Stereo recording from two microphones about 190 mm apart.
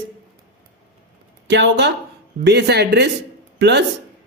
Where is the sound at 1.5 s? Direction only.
65° right (ahead or behind).